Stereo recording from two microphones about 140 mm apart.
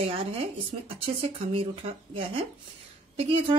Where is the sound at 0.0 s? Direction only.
40° right (ahead or behind).